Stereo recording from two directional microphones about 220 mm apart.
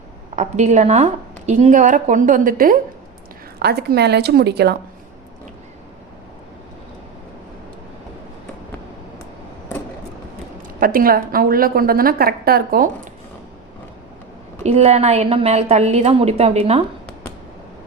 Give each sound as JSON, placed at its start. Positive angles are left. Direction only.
{"t": 0.3, "sound": "a woman's voice", "side_deg": -30}
{"t": 10.8, "sound": "a woman's voice", "side_deg": -40}
{"t": 14.6, "sound": "a woman's voice", "side_deg": -30}